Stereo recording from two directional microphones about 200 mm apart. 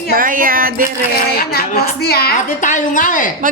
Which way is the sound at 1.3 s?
50° left (ahead or behind).